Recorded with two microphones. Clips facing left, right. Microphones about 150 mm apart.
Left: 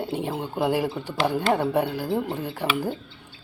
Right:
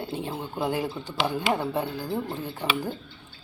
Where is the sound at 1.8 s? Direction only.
70° left (ahead or behind).